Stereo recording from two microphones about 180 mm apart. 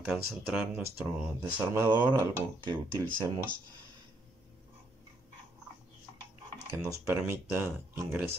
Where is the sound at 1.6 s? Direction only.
10° right (ahead or behind).